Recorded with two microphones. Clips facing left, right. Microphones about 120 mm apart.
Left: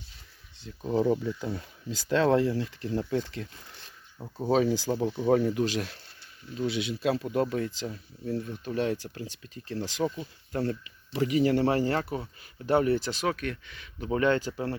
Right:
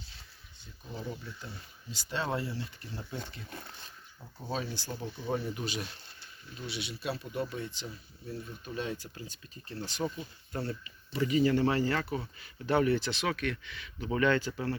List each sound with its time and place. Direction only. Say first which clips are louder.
0.8 s speech: left 15 dB; 90° left
7.0 s speech: left 8 dB; 90° left; by 14.8 s 30° left (ahead or behind)